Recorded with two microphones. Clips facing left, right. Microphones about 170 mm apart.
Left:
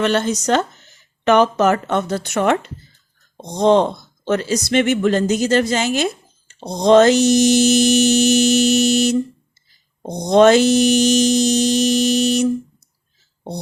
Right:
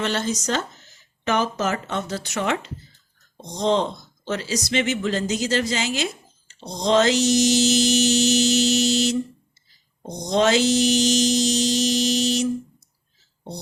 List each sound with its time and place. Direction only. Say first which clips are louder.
0.0 s speech: left 7 dB; 60° left (ahead or behind)
6.5 s a sound: left 8 dB; 55° left (ahead or behind)
10.0 s mantra: left 8 dB; 55° left (ahead or behind)